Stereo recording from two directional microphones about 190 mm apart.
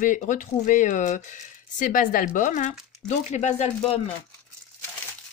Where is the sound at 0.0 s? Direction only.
40° left (ahead or behind).